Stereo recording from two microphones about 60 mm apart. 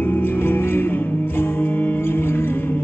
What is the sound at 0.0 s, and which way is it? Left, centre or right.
Music, left.